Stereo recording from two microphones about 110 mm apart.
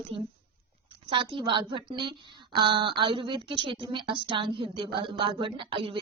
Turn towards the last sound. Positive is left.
turn(degrees=-55)  # may be behind; listen again after turning